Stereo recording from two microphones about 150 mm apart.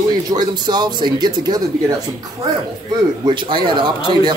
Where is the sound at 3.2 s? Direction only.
35° right (ahead or behind).